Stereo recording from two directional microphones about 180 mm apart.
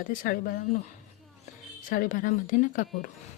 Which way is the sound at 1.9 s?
50° left (ahead or behind).